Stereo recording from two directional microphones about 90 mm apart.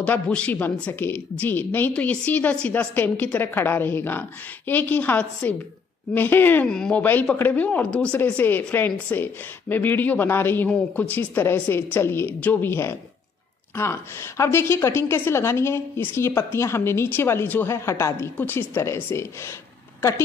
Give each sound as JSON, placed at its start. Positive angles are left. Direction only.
{"t": 0.0, "sound": "a woman's voice", "side_deg": 15}
{"t": 6.7, "sound": "speech", "side_deg": 10}
{"t": 7.0, "sound": "a woman's voice", "side_deg": 20}
{"t": 13.7, "sound": "a woman's voice", "side_deg": 30}